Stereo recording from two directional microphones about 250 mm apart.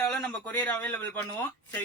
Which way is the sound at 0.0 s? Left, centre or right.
Centre.